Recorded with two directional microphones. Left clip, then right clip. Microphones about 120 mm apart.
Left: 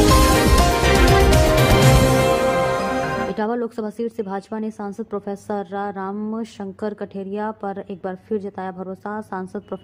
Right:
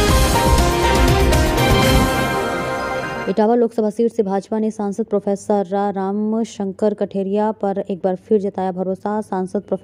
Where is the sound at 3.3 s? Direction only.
25° right (ahead or behind).